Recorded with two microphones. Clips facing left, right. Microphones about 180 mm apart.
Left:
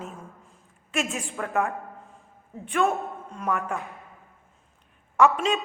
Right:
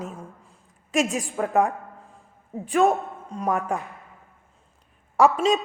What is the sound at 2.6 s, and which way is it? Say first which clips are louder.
A woman's voice: right 4 dB; 35° right (ahead or behind).